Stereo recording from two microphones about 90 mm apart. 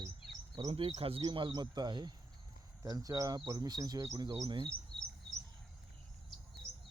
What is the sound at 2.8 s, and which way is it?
Speech, 40° right (ahead or behind).